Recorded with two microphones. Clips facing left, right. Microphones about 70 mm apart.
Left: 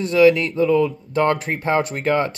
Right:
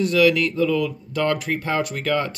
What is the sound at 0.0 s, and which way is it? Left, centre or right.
Speech, left.